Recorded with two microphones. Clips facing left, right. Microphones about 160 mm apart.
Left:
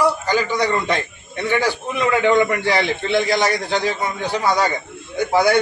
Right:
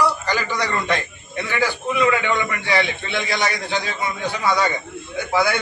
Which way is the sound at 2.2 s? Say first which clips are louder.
Left 7 dB; 45° left (ahead or behind).